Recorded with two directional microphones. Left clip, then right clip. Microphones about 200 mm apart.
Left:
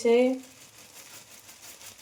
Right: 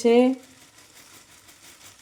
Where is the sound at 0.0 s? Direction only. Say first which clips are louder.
Right 4 dB; 55° right (ahead or behind).